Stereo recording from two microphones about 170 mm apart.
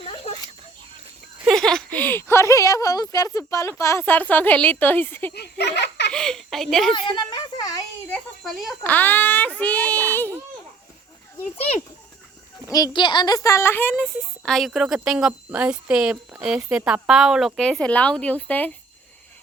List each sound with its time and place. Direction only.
0.0 s a sound: 35° left (ahead or behind)
1.5 s speech: centre (ahead or behind)
5.3 s a sound: 75° left (ahead or behind)
6.1 s speech: 5° left (ahead or behind)
6.9 s a child's voice: 25° left (ahead or behind)
8.4 s speech: centre (ahead or behind)
8.8 s speech: 10° left (ahead or behind)
11.5 s a child's voice: 35° left (ahead or behind)
12.6 s speech: 20° left (ahead or behind)